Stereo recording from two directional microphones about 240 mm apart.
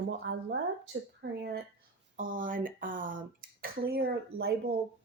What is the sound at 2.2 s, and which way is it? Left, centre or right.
Speech, right.